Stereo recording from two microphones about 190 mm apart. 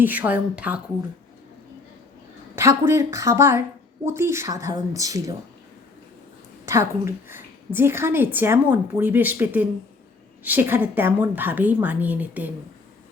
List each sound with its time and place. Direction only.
0.0 s a woman's voice: 10° right (ahead or behind)
2.6 s a woman's voice: 15° right (ahead or behind)
6.7 s a woman's voice: 15° right (ahead or behind)